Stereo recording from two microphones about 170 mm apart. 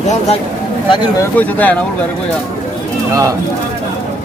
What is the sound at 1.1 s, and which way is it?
Speech, 10° left (ahead or behind).